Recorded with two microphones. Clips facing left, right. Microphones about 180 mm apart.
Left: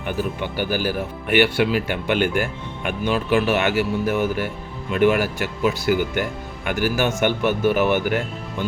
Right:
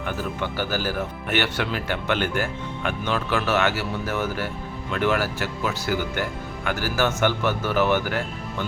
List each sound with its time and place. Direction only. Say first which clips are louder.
0.0 s a man's voice: left 3 dB; 15° left (ahead or behind)